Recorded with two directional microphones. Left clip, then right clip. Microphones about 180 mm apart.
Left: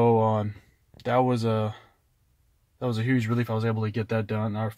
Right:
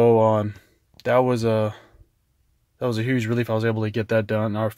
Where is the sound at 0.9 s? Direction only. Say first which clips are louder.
Right 4 dB; 30° right (ahead or behind).